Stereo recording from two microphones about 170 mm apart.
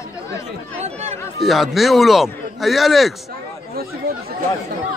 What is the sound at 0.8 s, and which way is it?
Speech, 40° right (ahead or behind).